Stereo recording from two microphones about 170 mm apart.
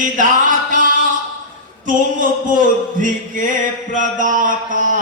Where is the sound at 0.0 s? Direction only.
50° right (ahead or behind).